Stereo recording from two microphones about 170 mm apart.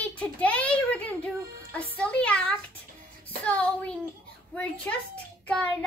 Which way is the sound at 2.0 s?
5° left (ahead or behind).